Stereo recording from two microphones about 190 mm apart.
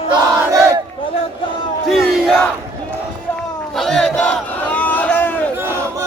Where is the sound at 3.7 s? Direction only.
Centre (ahead or behind).